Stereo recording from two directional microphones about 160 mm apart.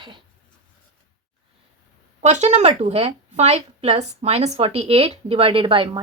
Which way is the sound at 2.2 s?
45° right (ahead or behind).